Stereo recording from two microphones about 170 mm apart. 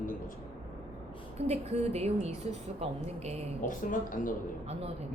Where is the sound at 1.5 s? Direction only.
40° right (ahead or behind).